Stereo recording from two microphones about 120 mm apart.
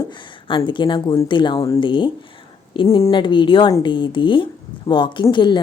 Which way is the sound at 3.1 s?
40° left (ahead or behind).